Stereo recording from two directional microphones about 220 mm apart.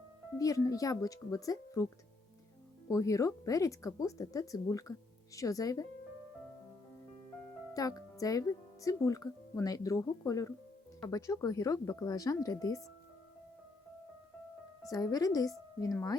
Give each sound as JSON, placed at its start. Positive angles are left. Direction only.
{"t": 0.3, "sound": "speech", "side_deg": 15}
{"t": 2.9, "sound": "speech", "side_deg": 15}
{"t": 7.7, "sound": "speech", "side_deg": 15}
{"t": 14.8, "sound": "speech", "side_deg": 15}